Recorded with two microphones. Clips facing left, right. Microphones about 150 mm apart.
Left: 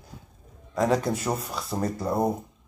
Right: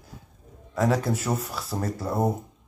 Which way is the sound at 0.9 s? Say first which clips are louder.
Left 1 dB; 5° right (ahead or behind).